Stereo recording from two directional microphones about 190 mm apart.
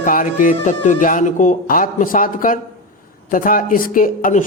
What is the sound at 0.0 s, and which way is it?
Speech, 45° left (ahead or behind).